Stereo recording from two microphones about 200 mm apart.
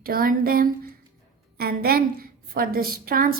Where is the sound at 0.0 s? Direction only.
45° right (ahead or behind).